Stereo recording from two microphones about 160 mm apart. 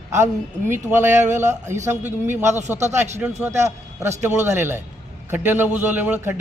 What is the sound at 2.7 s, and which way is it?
Speech, 45° right (ahead or behind).